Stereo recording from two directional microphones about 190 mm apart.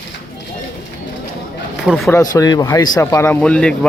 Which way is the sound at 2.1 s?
20° left (ahead or behind).